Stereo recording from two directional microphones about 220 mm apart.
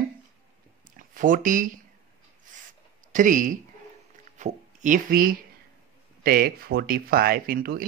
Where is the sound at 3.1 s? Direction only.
35° right (ahead or behind).